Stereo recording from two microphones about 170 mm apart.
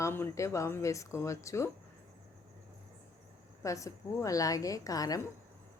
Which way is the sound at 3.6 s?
20° left (ahead or behind).